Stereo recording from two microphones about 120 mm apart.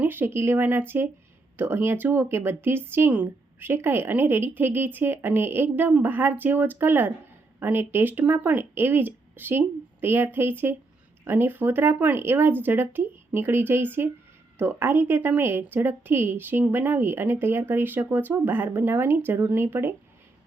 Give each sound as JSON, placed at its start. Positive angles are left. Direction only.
{"t": 0.0, "sound": "a woman's voice", "side_deg": -15}